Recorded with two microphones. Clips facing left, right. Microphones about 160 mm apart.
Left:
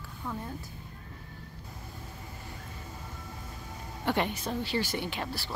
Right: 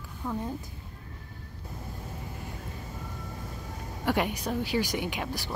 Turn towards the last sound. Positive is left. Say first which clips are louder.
# right 2 dB
turn(degrees=-15)  # may be behind; listen again after turning